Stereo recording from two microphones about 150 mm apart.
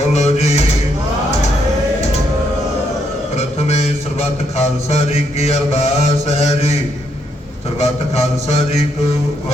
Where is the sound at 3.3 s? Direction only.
45° left (ahead or behind).